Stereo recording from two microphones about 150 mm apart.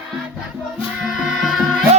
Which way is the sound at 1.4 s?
Centre (ahead or behind).